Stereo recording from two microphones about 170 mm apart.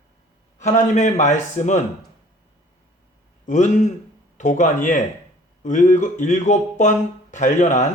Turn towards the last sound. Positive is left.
turn(degrees=45)  # may be behind; listen again after turning